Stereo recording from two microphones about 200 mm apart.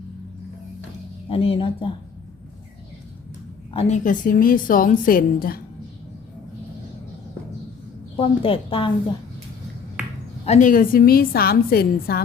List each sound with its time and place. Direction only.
1.3 s a woman's voice: 30° left (ahead or behind)
3.7 s a woman's voice: 30° left (ahead or behind)
8.2 s a woman's voice: 30° left (ahead or behind)
10.4 s a woman's voice: 35° left (ahead or behind)